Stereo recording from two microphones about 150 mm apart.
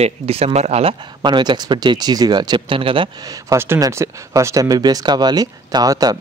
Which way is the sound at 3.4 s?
15° right (ahead or behind).